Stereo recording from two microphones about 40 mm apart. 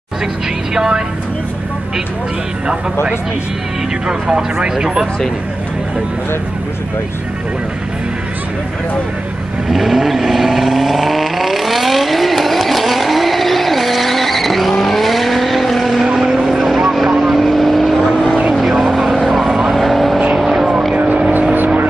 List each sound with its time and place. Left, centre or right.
0.7 s a woman's voice: centre
4.1 s speech: centre
9.7 s vehicle: centre
16.1 s vehicle: centre
20.9 s vehicle: right